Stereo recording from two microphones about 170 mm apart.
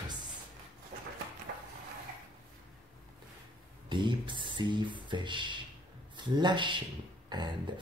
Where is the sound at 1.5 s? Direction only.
65° right (ahead or behind).